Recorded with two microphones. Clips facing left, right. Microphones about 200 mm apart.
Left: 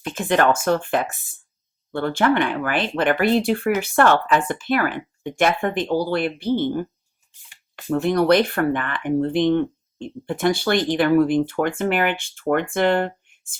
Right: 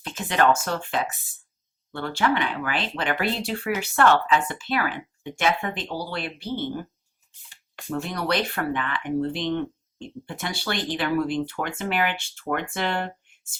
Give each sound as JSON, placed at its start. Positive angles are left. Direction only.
{"t": 0.1, "sound": "speech", "side_deg": 55}
{"t": 8.0, "sound": "speech", "side_deg": 55}